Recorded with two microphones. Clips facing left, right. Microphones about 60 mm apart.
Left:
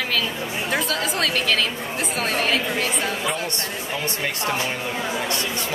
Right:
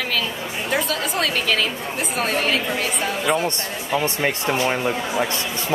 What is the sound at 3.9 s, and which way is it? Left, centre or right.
Speech, right.